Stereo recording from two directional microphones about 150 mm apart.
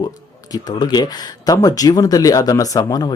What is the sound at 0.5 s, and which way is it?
Speech, 30° left (ahead or behind).